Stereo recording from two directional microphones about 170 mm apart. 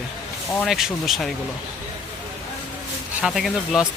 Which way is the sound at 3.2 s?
Centre (ahead or behind).